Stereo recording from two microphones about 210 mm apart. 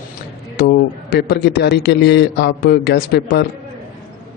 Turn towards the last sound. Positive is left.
turn(degrees=50)  # may be behind; listen again after turning